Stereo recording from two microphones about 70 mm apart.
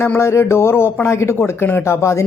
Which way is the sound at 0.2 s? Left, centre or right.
Left.